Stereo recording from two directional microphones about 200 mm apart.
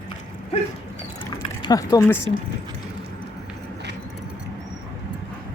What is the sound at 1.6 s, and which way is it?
Speech, 20° left (ahead or behind).